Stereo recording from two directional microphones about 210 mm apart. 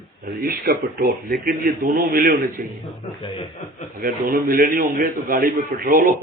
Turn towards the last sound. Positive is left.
turn(degrees=-40)  # may be behind; listen again after turning